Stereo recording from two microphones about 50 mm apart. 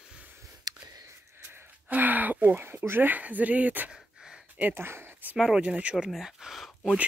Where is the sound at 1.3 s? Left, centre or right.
Right.